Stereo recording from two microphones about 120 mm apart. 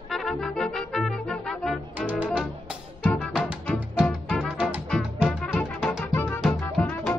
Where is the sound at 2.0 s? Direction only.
10° right (ahead or behind).